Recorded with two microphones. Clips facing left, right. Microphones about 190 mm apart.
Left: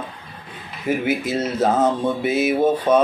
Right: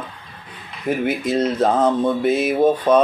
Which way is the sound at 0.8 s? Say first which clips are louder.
Right 1 dB; 5° left (ahead or behind).